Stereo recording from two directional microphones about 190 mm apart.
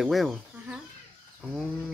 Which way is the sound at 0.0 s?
Centre (ahead or behind).